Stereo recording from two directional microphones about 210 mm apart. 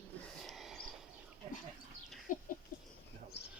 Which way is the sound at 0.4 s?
Centre (ahead or behind).